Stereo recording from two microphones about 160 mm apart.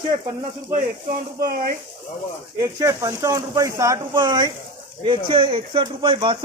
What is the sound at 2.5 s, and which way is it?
Speech, 20° right (ahead or behind).